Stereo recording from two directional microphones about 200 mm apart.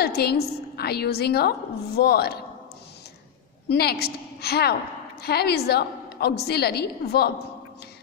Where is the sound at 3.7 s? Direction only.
50° left (ahead or behind).